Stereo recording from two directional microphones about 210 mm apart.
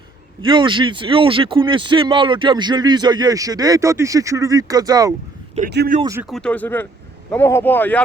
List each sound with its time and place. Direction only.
0.4 s speech: 25° right (ahead or behind)
6.2 s speech: 5° left (ahead or behind)